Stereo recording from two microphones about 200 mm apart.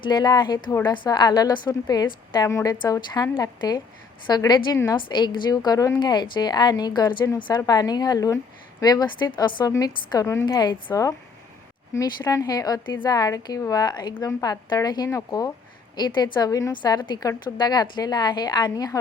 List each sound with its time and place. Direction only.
0.0 s a woman's voice: 20° left (ahead or behind)